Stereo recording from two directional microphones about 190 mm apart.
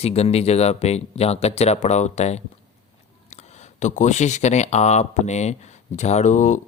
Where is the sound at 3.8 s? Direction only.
40° left (ahead or behind).